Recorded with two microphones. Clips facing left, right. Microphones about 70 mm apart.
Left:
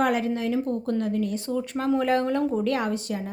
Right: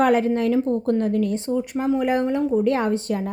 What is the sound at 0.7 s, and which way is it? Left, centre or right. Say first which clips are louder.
Speech: right 5 dB; right.